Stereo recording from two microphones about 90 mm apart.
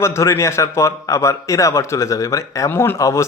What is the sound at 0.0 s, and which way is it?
Speech, 35° left (ahead or behind).